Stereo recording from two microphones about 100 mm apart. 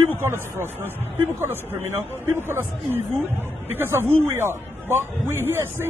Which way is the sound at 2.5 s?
20° right (ahead or behind).